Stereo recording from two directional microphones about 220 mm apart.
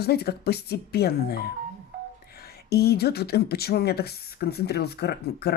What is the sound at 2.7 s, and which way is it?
Speech, 45° left (ahead or behind).